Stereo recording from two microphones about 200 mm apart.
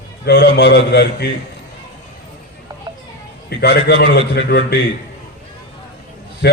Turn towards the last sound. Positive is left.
turn(degrees=55)  # may be behind; listen again after turning